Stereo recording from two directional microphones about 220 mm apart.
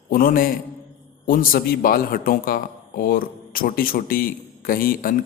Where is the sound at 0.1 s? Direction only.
40° left (ahead or behind).